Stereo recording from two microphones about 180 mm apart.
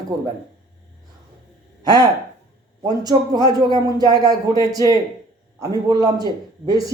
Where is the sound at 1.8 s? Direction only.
20° right (ahead or behind).